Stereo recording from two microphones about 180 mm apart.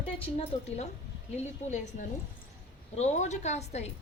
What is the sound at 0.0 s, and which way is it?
A woman's voice, 35° left (ahead or behind).